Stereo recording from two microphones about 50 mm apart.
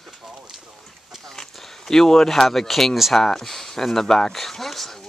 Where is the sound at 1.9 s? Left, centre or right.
Centre.